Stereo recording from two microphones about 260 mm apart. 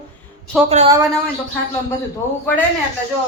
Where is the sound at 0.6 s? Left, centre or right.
Right.